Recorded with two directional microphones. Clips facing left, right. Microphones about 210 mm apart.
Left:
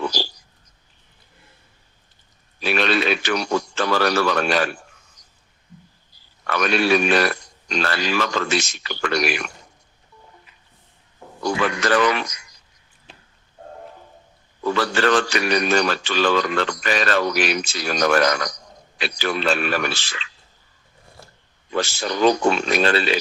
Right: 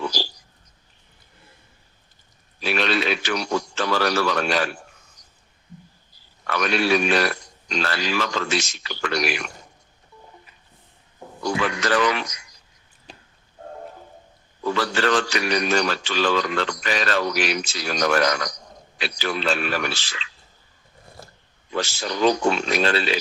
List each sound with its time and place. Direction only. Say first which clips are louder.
0.0 s a sound: left 2 dB; 55° left (ahead or behind)
2.6 s a man's voice: left 2 dB; 55° left (ahead or behind)
6.5 s a man's voice: left 2 dB; 55° left (ahead or behind)
11.4 s a man's voice: left 2 dB; 55° left (ahead or behind)
14.6 s a man's voice: left 2 dB; 55° left (ahead or behind)
21.2 s a sound: right 3 dB; 40° right (ahead or behind)
21.7 s a man's voice: left 3 dB; 55° left (ahead or behind)